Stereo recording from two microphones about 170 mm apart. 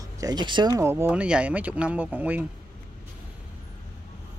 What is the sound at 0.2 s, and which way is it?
Speech, 25° right (ahead or behind).